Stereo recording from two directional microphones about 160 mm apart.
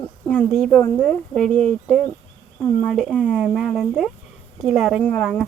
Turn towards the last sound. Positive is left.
turn(degrees=5)  # may be behind; listen again after turning